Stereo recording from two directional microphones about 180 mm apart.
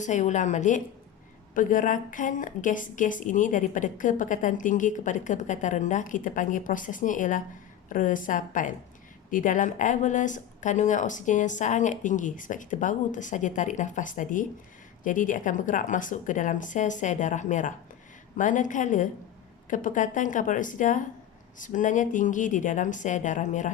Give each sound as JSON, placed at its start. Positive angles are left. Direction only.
{"t": 0.0, "sound": "a woman's voice", "side_deg": 45}